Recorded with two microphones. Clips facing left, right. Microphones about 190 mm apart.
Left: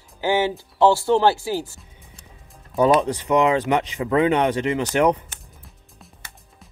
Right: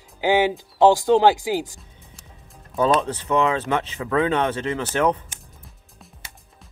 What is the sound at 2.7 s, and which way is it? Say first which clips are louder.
Speech: left 3 dB; 15° left (ahead or behind).